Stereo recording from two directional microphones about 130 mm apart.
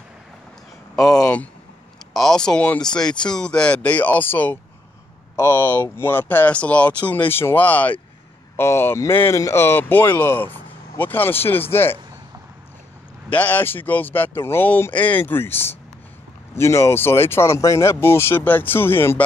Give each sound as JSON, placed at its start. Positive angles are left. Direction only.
{"t": 1.2, "sound": "speech", "side_deg": 10}
{"t": 13.3, "sound": "speech", "side_deg": 10}